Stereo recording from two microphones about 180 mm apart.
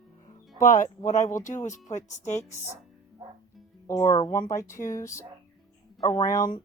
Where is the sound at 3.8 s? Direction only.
15° left (ahead or behind).